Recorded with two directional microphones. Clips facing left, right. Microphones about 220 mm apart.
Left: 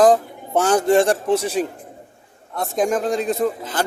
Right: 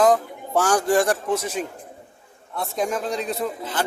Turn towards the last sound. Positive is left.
turn(degrees=45)  # may be behind; listen again after turning